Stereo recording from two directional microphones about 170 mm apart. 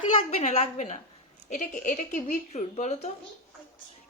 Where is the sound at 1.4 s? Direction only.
50° left (ahead or behind).